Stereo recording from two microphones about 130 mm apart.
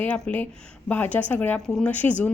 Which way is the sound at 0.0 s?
10° left (ahead or behind).